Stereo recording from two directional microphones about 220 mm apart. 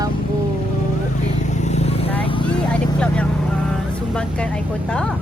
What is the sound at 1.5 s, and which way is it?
Vehicle, 30° left (ahead or behind).